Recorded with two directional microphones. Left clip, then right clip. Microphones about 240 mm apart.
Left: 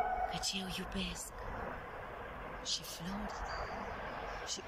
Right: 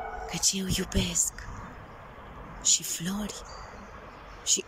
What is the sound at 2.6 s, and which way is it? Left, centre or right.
Speech, right.